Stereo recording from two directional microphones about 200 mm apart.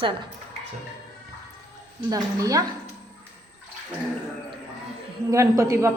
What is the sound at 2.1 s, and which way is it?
Speech, 15° right (ahead or behind).